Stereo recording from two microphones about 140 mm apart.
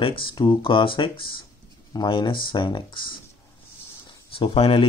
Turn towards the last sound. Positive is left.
turn(degrees=40)  # may be behind; listen again after turning